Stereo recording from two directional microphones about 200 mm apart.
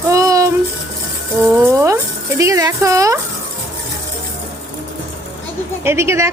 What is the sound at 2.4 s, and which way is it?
Speech, 15° right (ahead or behind).